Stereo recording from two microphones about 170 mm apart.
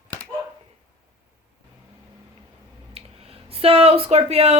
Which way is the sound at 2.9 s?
35° right (ahead or behind).